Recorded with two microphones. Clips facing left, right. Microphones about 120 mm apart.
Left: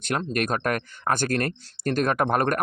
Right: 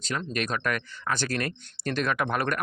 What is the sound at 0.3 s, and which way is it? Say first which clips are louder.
Speech: left 3 dB; 50° left (ahead or behind).